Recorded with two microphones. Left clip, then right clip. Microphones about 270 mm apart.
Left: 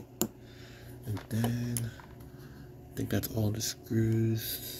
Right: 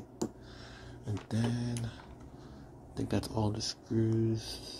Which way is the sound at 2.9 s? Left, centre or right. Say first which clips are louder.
Even; centre.